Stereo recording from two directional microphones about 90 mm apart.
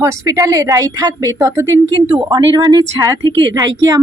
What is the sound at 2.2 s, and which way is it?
Speech, 50° right (ahead or behind).